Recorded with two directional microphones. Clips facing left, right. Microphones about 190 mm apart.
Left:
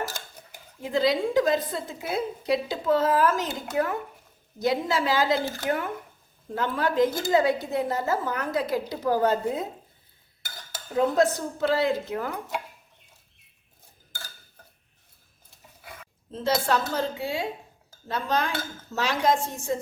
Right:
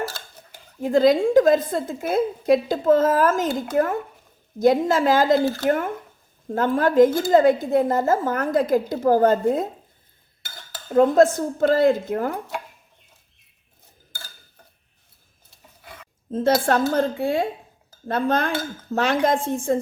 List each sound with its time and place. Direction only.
0.8 s a woman's voice: 50° right (ahead or behind)
10.9 s a woman's voice: 50° right (ahead or behind)
16.3 s a woman's voice: 50° right (ahead or behind)